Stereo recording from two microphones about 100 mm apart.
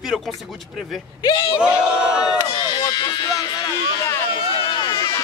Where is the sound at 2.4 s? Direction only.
40° left (ahead or behind).